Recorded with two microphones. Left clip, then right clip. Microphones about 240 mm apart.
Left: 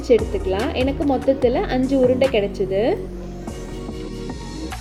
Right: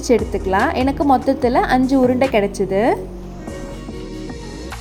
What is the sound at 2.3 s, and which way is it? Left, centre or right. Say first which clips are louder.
Speech: right 3 dB; right.